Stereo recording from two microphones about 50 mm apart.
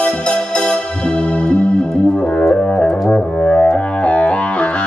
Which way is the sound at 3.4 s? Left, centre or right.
Centre.